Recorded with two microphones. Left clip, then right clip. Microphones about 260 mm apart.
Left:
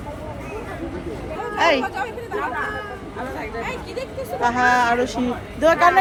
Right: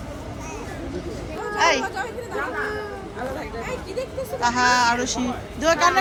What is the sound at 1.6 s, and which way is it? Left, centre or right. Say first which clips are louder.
Speech: left 2 dB; centre.